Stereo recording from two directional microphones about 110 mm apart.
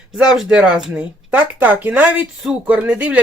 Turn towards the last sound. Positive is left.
turn(degrees=-10)  # may be behind; listen again after turning